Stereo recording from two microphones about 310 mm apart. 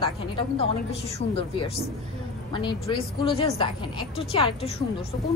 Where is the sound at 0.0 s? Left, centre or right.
Centre.